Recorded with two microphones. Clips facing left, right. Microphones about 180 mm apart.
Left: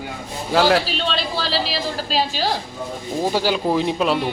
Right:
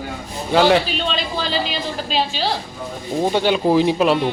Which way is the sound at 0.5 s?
Centre (ahead or behind).